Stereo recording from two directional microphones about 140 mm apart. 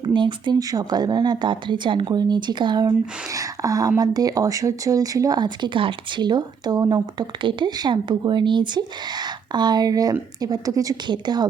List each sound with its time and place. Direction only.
0.0 s speech: 35° right (ahead or behind)